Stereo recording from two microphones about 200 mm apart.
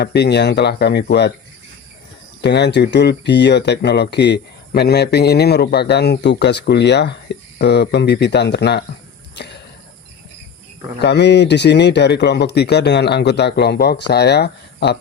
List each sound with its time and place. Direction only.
0.0 s speech: 55° left (ahead or behind)
2.4 s speech: 55° left (ahead or behind)
9.3 s a sound: 60° left (ahead or behind)
11.0 s speech: 55° left (ahead or behind)